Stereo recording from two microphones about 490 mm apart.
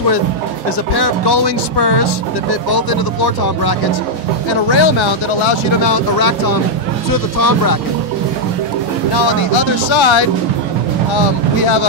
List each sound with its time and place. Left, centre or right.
0.9 s speech: left
4.6 s speech: left
6.1 s speech: left
9.1 s speech: left
11.6 s speech: left